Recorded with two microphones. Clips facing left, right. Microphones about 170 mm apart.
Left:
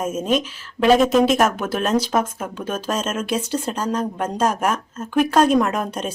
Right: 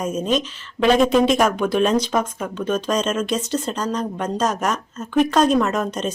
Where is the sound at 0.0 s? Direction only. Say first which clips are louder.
Even; 5° left (ahead or behind).